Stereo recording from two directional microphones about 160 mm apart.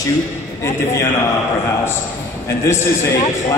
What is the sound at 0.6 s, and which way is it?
Speech, 15° left (ahead or behind).